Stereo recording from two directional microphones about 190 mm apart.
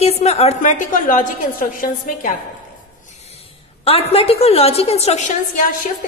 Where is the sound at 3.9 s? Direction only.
30° left (ahead or behind).